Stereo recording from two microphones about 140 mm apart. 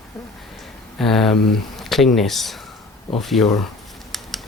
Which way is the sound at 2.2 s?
Centre (ahead or behind).